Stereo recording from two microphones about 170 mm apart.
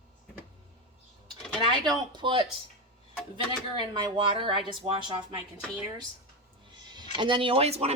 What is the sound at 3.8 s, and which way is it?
A woman's voice, 30° right (ahead or behind).